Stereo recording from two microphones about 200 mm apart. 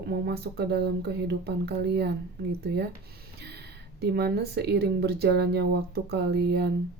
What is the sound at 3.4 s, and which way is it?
Speech, 55° right (ahead or behind).